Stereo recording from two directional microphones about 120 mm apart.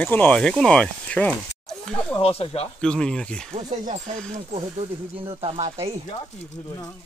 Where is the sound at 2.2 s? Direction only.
55° left (ahead or behind).